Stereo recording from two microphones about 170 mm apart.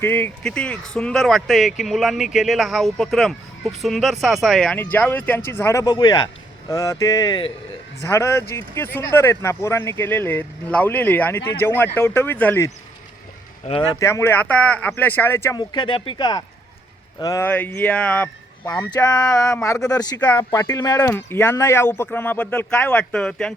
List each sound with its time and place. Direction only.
0.0 s speech: 10° left (ahead or behind); by 7.5 s 25° left (ahead or behind)
8.0 s speech: 15° left (ahead or behind)
13.7 s speech: 30° left (ahead or behind)
14.0 s speech: 15° left (ahead or behind)
15.5 s speech: 25° left (ahead or behind)
20.1 s speech: 10° left (ahead or behind)
20.5 s speech: 20° left (ahead or behind); by 23.6 s 5° left (ahead or behind)